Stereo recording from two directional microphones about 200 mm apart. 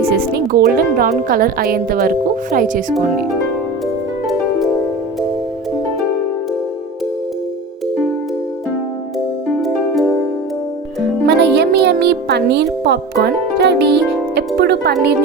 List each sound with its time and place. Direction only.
0.1 s speech: 50° right (ahead or behind)
9.6 s music: centre (ahead or behind)
11.3 s music: 60° right (ahead or behind)